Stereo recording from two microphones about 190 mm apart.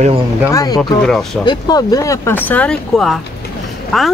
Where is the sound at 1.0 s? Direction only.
Centre (ahead or behind).